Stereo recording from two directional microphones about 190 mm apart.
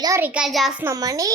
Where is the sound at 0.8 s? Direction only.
20° right (ahead or behind).